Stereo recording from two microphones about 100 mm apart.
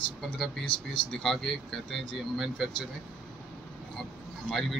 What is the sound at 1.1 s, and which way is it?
Speech, 5° left (ahead or behind).